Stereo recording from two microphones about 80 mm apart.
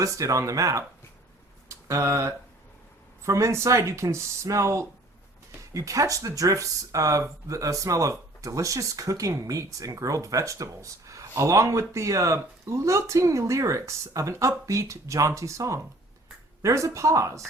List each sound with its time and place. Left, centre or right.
0.0 s speech: right
1.6 s a sound: right
3.2 s speech: right